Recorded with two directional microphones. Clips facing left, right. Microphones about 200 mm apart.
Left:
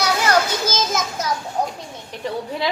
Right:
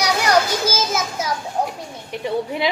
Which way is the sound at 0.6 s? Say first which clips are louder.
Right 1 dB; 10° right (ahead or behind).